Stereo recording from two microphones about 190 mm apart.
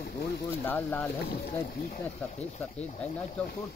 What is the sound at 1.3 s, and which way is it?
Speech, 55° left (ahead or behind).